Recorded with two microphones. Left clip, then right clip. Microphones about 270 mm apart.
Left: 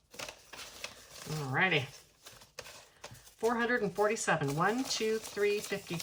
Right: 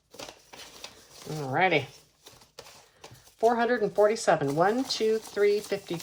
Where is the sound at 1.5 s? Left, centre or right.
Centre.